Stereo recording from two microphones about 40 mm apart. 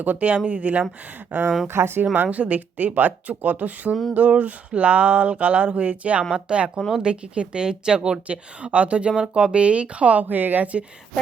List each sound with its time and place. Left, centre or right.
0.0 s a woman's voice: right
0.3 s a woman's voice: right
0.6 s a sound: right
1.6 s speech: right
2.1 s a sound: right
6.3 s a woman's voice: right
10.2 s a woman's voice: right